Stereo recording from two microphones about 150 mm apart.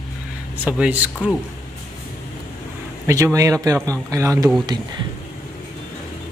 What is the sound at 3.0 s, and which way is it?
A man's voice, 20° right (ahead or behind).